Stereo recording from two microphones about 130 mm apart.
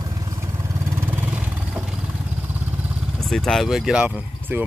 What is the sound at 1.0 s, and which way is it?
Vehicle, 15° right (ahead or behind).